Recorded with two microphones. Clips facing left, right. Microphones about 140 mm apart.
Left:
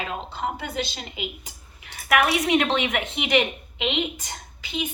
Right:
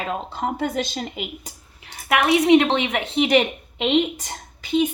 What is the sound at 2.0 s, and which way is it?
A woman's voice, 25° right (ahead or behind).